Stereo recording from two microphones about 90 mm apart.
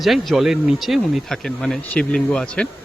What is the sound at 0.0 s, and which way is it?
Speech, centre (ahead or behind).